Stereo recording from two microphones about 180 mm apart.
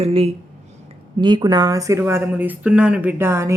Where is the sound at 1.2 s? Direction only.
25° right (ahead or behind).